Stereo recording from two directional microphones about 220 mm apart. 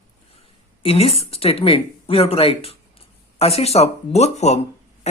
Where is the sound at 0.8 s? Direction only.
25° left (ahead or behind).